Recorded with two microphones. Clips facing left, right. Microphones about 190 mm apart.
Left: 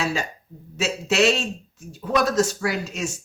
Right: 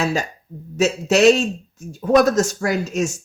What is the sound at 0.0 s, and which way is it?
Speech, 45° right (ahead or behind).